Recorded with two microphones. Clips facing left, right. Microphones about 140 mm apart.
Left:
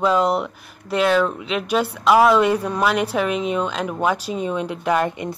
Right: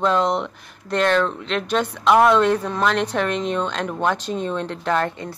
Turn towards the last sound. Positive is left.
turn(degrees=15)  # may be behind; listen again after turning